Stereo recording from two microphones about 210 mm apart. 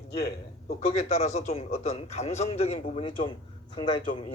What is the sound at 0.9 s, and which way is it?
A man's voice, 30° left (ahead or behind).